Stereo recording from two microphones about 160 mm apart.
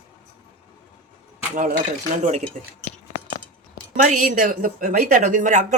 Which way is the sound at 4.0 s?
55° right (ahead or behind).